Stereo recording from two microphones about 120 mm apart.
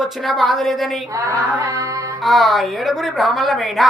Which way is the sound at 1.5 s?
30° right (ahead or behind).